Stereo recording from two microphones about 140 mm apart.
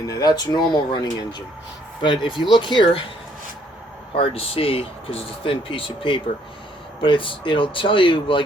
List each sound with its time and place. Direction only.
0.1 s speech: 25° left (ahead or behind)
4.1 s speech: 40° left (ahead or behind)